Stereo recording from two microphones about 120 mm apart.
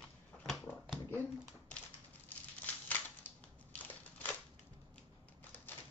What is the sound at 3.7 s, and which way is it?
Crushing, 15° left (ahead or behind).